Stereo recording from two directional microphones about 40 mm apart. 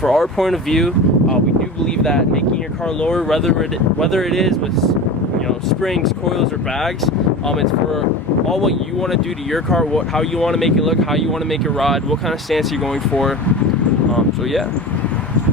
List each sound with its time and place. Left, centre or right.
0.0 s speech: centre
2.0 s speech: centre
8.4 s speech: centre